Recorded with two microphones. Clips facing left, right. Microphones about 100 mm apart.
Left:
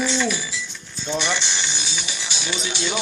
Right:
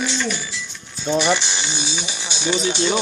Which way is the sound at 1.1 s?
10° right (ahead or behind).